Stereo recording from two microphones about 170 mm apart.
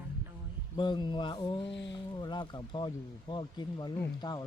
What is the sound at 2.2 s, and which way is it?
A man's voice, 25° left (ahead or behind).